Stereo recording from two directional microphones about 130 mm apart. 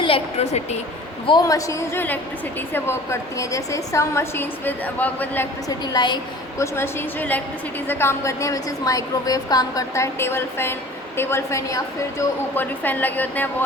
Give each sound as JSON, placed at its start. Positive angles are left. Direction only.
{"t": 0.0, "sound": "a woman's voice", "side_deg": 50}
{"t": 1.3, "sound": "a woman's voice", "side_deg": 25}
{"t": 5.6, "sound": "a woman's voice", "side_deg": 30}
{"t": 6.6, "sound": "a woman's voice", "side_deg": 20}